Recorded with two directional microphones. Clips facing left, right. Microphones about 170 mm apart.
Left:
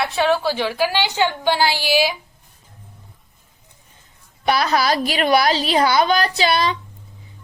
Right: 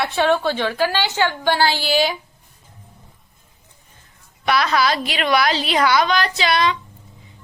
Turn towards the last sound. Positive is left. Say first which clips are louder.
# even
turn(degrees=35)  # may be behind; listen again after turning